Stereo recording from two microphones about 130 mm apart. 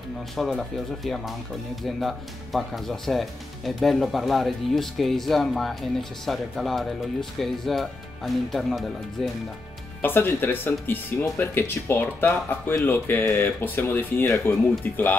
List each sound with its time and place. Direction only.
0.4 s speech: centre (ahead or behind)
10.0 s speech: 15° left (ahead or behind)